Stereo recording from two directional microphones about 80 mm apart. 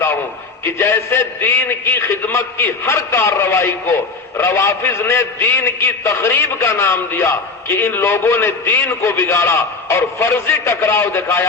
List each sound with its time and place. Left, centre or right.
0.6 s a man's voice: left